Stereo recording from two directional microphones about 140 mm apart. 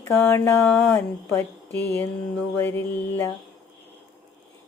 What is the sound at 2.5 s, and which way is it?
Speech, 15° left (ahead or behind).